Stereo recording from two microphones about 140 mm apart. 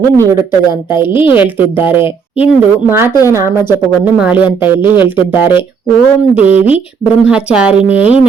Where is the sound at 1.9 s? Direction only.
40° left (ahead or behind).